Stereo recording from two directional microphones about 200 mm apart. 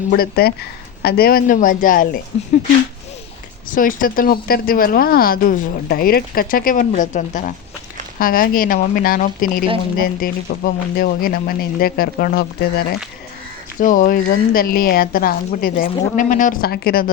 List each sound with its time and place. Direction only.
0.1 s a woman's voice: 50° left (ahead or behind)
3.7 s a woman's voice: 45° left (ahead or behind)
13.7 s a woman's voice: 40° left (ahead or behind)